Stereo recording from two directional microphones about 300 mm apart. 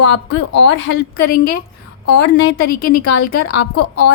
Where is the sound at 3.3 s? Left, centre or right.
Left.